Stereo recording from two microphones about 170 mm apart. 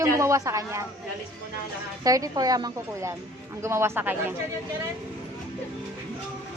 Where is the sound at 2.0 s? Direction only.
20° right (ahead or behind).